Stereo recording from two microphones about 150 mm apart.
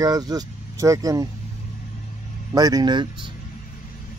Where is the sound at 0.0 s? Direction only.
25° right (ahead or behind).